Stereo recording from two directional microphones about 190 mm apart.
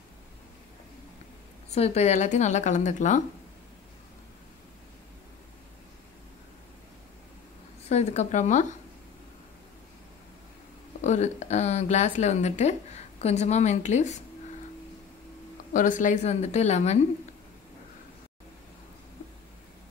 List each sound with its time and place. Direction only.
1.7 s a woman's voice: 35° left (ahead or behind)
7.9 s a woman's voice: 35° left (ahead or behind)
11.0 s a woman's voice: 35° left (ahead or behind)
15.7 s a woman's voice: 40° left (ahead or behind)